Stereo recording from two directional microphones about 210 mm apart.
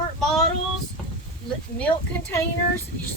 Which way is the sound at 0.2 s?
Centre (ahead or behind).